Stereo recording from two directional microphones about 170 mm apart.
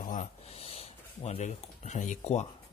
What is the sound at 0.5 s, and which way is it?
Speech, 35° left (ahead or behind).